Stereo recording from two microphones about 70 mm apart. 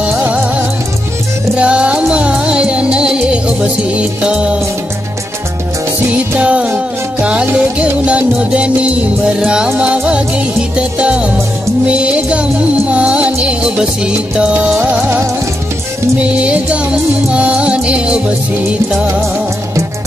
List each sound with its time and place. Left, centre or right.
1.6 s music: centre
6.3 s music: centre
14.8 s music: right
16.4 s music: centre